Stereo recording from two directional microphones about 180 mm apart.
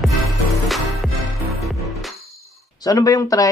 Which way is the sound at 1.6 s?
Centre (ahead or behind).